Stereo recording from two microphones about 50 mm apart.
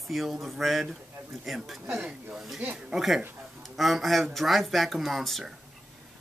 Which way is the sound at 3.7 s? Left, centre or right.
Centre.